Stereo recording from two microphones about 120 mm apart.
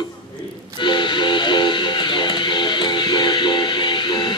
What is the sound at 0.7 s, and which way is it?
Music, 40° left (ahead or behind).